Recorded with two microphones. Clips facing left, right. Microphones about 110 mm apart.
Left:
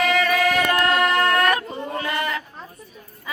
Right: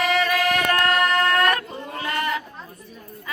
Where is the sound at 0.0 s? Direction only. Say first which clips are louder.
Left 1 dB; centre (ahead or behind).